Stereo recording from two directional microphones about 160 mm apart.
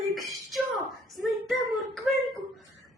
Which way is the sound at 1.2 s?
Centre (ahead or behind).